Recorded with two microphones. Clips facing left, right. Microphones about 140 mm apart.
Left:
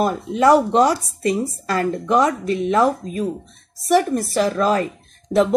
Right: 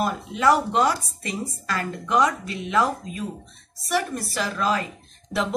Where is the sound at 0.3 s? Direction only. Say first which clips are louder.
Left 6 dB; 40° left (ahead or behind).